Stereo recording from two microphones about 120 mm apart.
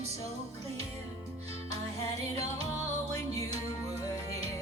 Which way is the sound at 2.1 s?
60° right (ahead or behind).